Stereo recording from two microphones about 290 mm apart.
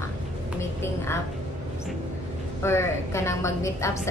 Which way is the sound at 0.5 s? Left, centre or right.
Centre.